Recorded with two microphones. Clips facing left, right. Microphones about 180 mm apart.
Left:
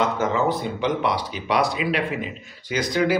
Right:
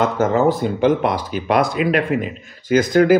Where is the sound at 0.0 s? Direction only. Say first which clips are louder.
Right 6 dB; 50° right (ahead or behind).